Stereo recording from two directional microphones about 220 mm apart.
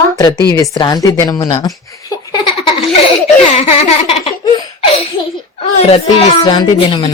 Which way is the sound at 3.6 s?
25° left (ahead or behind).